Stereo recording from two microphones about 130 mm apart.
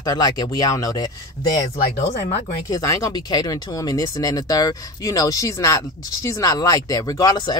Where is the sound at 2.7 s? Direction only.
25° left (ahead or behind).